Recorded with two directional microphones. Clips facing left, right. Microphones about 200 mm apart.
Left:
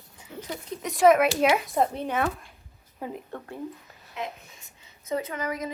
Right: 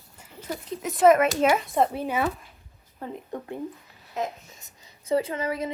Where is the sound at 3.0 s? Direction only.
10° left (ahead or behind).